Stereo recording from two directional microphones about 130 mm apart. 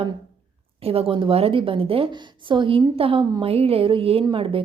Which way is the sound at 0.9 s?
45° right (ahead or behind).